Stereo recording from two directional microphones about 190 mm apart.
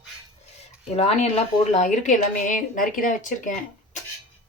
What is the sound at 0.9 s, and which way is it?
A woman's voice, 35° left (ahead or behind).